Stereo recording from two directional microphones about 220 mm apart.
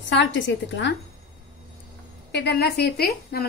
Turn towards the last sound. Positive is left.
turn(degrees=45)  # may be behind; listen again after turning